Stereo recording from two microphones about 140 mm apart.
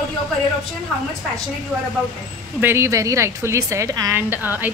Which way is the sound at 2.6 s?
20° right (ahead or behind).